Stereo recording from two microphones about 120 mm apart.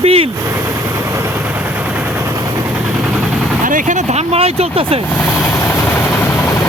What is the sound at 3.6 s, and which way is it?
Speech, 90° right.